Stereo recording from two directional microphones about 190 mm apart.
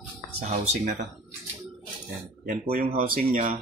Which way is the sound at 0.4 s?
40° right (ahead or behind).